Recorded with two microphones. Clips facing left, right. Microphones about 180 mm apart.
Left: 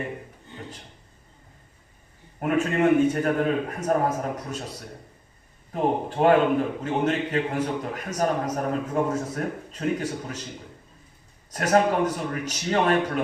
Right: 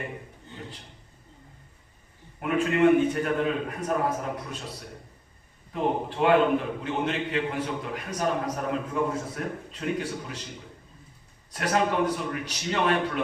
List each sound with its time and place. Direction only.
2.4 s a man's voice: 45° left (ahead or behind)
5.7 s a man's voice: 45° left (ahead or behind)
11.5 s a man's voice: 45° left (ahead or behind)